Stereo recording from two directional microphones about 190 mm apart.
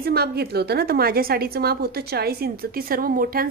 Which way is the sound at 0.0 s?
55° right (ahead or behind).